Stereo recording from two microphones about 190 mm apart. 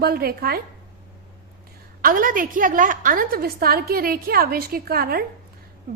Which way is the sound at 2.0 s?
45° right (ahead or behind).